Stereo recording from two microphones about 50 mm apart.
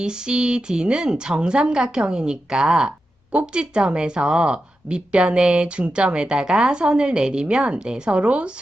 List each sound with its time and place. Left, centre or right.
0.0 s a woman's voice: centre